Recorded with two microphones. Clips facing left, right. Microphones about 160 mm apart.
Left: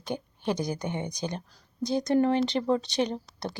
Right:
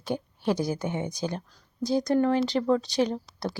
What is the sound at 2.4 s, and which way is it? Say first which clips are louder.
Speech: right 2 dB; 20° left (ahead or behind).